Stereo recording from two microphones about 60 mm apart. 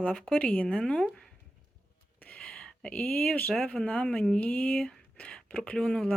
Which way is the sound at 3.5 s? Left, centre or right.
Centre.